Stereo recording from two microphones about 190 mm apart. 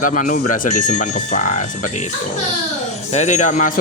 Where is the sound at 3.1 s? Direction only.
40° left (ahead or behind).